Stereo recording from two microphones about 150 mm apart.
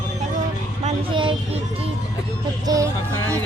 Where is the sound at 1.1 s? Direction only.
35° right (ahead or behind).